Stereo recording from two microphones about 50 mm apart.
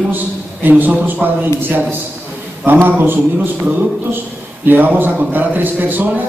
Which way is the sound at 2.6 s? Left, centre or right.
Right.